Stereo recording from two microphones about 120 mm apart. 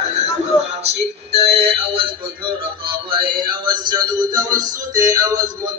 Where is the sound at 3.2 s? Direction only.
40° right (ahead or behind).